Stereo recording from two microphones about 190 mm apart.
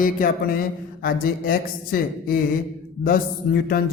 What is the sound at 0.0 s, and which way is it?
Speech, 50° left (ahead or behind).